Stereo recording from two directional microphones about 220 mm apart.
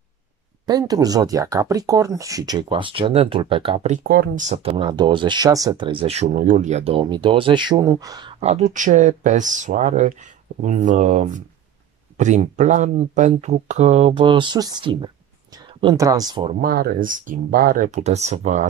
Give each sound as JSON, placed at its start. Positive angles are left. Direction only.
{"t": 0.7, "sound": "speech", "side_deg": -15}
{"t": 4.5, "sound": "speech", "side_deg": -25}
{"t": 16.6, "sound": "speech", "side_deg": -45}